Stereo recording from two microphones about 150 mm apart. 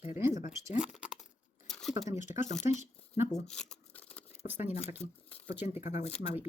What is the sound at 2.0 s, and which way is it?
Speech, 20° right (ahead or behind).